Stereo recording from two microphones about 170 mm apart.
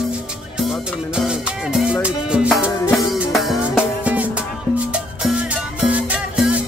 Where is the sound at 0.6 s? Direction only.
5° right (ahead or behind).